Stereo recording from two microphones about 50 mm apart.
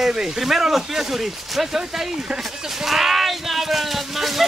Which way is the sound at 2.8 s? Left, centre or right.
Centre.